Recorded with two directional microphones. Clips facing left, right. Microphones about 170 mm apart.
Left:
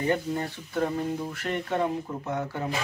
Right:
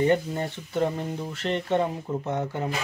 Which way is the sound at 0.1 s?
25° right (ahead or behind).